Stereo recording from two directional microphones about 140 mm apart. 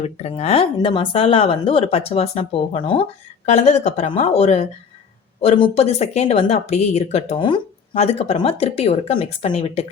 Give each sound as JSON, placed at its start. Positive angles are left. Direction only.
{"t": 0.0, "sound": "speech", "side_deg": 45}
{"t": 3.4, "sound": "speech", "side_deg": 55}
{"t": 7.3, "sound": "speech", "side_deg": 35}